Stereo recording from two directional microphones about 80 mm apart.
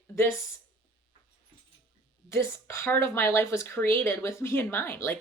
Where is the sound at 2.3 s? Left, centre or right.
Left.